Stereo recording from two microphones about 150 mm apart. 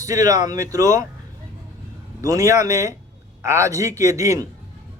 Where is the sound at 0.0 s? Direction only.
25° right (ahead or behind).